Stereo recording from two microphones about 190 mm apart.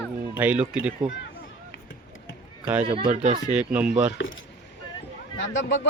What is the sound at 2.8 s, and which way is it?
Speech, 30° right (ahead or behind).